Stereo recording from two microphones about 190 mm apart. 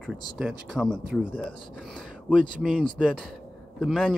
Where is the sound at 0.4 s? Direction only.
5° right (ahead or behind).